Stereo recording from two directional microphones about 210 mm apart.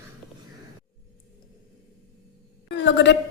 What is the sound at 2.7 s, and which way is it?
Speech, 55° left (ahead or behind).